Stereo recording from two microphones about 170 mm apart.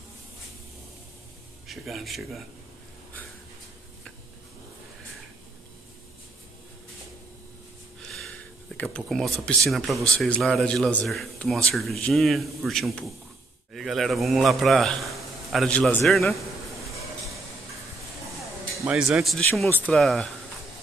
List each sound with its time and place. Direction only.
1.7 s a man's voice: centre (ahead or behind)
8.1 s a man's voice: 5° left (ahead or behind)
16.1 s a sound: centre (ahead or behind)
18.9 s a man's voice: 5° right (ahead or behind)